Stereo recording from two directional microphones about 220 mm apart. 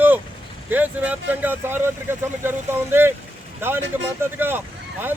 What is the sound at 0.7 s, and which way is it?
Speech, 5° right (ahead or behind).